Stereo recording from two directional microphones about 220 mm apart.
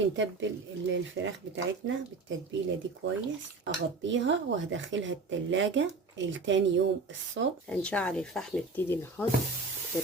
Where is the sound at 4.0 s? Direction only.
55° right (ahead or behind).